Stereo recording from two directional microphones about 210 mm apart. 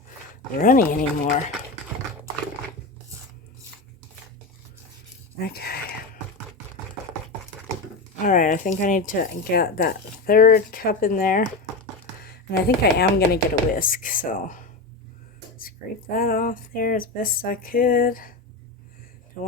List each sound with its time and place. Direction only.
0.6 s speech: 40° left (ahead or behind)
5.4 s a sound: 45° left (ahead or behind)
8.2 s speech: 40° left (ahead or behind)